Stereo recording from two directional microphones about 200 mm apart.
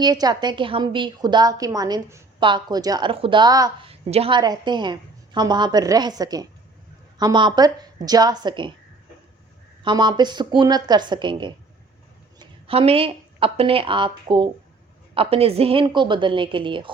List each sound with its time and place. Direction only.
0.0 s a woman's voice: 20° right (ahead or behind)
9.8 s a woman's voice: 20° right (ahead or behind)